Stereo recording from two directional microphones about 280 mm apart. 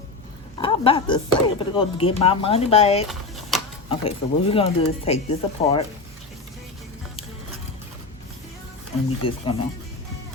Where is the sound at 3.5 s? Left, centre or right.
Centre.